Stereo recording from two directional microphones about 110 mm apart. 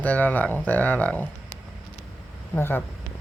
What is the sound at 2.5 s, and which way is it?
Speech, 20° left (ahead or behind).